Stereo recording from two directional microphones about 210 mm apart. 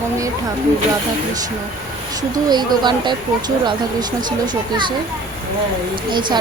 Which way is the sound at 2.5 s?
20° right (ahead or behind).